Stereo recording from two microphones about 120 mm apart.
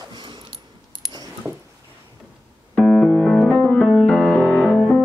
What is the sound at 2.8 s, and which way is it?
Music, 5° left (ahead or behind).